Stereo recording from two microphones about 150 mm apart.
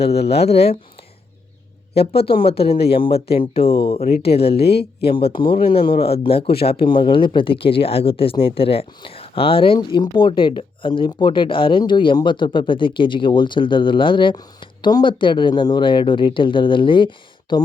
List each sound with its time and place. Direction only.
0.2 s speech: 90° left
0.4 s speech: 45° left (ahead or behind)
2.0 s speech: 90° left
2.3 s speech: 35° left (ahead or behind)
4.6 s speech: 90° left
5.1 s speech: 35° left (ahead or behind)
6.5 s speech: 90° left
6.7 s speech: 35° left (ahead or behind)